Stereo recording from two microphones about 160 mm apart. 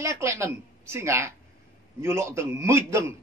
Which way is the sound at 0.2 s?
15° right (ahead or behind).